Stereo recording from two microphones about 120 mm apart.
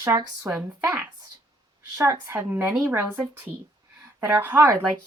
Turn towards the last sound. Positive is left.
turn(degrees=-25)  # may be behind; listen again after turning